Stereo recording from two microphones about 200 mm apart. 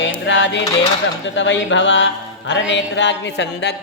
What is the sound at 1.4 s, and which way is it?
Speech, 65° left (ahead or behind).